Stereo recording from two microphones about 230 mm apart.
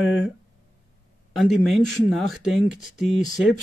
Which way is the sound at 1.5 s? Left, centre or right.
Centre.